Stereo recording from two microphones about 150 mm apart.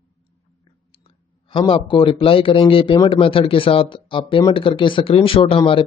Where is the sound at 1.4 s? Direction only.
35° left (ahead or behind).